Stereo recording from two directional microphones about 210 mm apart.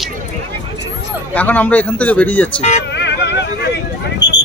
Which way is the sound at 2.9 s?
55° left (ahead or behind).